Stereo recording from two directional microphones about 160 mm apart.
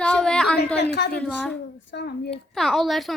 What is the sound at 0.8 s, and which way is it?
Speech, 90° left.